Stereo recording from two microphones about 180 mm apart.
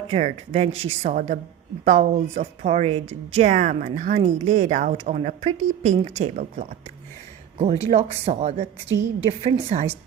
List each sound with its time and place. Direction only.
0.1 s a woman's voice: 35° right (ahead or behind)